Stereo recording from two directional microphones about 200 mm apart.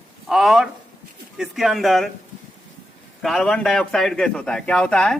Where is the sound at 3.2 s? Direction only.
Centre (ahead or behind).